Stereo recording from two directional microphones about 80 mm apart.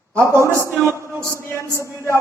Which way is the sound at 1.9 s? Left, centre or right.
Left.